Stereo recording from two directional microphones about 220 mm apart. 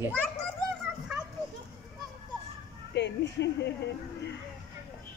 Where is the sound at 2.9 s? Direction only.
50° left (ahead or behind).